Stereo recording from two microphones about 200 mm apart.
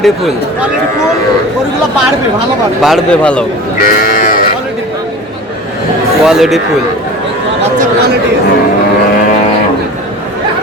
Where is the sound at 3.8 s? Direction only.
45° left (ahead or behind).